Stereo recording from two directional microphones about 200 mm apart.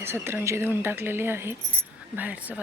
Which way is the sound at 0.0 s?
10° right (ahead or behind).